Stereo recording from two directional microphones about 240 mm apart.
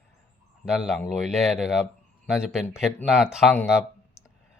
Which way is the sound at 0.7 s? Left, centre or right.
Centre.